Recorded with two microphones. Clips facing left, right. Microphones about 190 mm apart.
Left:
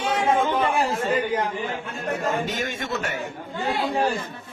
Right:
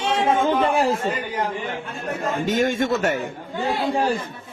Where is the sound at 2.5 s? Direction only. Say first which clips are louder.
Right 8 dB; 45° right (ahead or behind).